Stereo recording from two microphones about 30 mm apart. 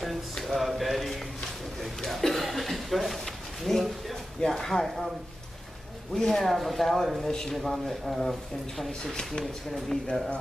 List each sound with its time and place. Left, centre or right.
0.5 s a sound: centre
2.0 s chuckle: centre
3.6 s a sound: centre
4.5 s speech: centre
4.8 s speech: centre
6.1 s speech: centre
7.2 s speech: centre
7.5 s speech: centre
9.0 s speech: left
9.4 s speech: centre